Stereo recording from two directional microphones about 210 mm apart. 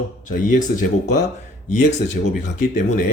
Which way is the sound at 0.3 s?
35° left (ahead or behind).